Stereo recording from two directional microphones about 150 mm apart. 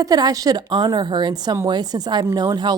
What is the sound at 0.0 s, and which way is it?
A woman's voice, 25° right (ahead or behind).